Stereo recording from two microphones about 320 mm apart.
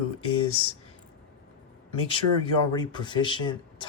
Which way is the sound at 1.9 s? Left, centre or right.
Centre.